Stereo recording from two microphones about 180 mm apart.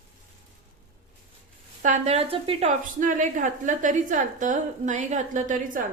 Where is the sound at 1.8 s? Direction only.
40° right (ahead or behind).